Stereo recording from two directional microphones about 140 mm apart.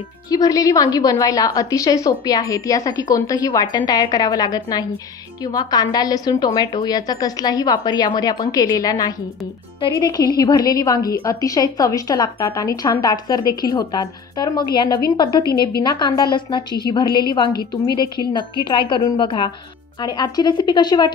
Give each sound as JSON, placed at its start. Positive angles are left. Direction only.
{"t": 0.3, "sound": "a woman's voice", "side_deg": 25}